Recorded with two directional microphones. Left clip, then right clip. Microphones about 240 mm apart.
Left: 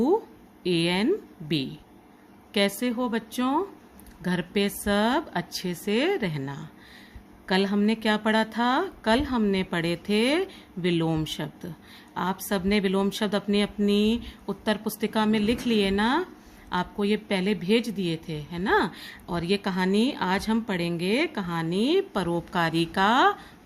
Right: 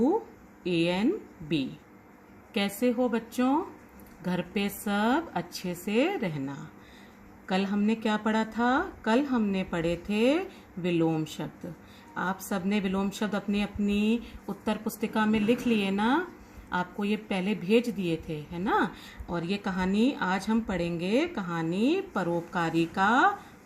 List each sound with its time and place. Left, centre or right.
2.5 s a woman's voice: left